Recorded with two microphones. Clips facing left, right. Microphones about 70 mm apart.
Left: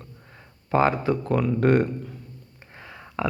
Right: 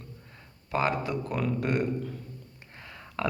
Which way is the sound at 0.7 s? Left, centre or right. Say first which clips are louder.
Left 7 dB; left.